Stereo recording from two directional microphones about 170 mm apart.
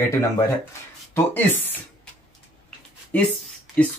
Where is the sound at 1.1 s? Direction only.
10° left (ahead or behind).